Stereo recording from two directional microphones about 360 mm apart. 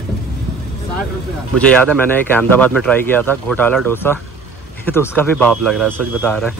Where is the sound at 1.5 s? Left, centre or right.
Centre.